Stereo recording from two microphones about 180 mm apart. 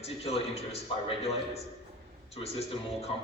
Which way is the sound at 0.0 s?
35° left (ahead or behind).